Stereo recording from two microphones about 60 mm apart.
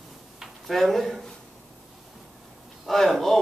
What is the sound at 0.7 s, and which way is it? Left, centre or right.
Speech, centre.